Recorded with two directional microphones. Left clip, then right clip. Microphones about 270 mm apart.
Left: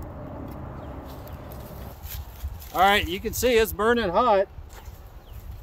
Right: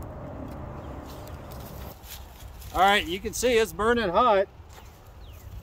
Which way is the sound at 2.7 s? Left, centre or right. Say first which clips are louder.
Left 1 dB; centre.